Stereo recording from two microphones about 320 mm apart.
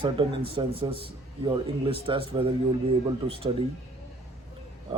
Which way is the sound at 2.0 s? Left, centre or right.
Centre.